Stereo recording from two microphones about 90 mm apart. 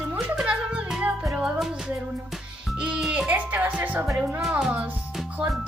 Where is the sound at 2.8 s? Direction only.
10° right (ahead or behind).